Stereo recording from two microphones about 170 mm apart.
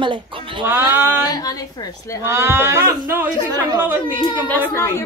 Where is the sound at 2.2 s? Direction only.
15° right (ahead or behind).